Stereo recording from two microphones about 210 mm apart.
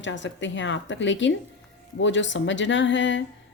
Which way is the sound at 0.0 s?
60° left (ahead or behind).